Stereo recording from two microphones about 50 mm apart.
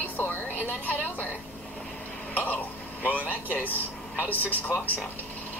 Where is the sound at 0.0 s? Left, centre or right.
Left.